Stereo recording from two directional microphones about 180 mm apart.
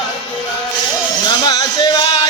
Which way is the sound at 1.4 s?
20° left (ahead or behind).